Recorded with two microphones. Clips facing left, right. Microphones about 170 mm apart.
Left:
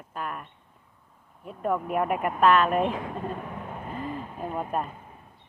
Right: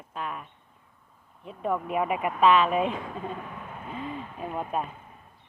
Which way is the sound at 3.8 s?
Centre (ahead or behind).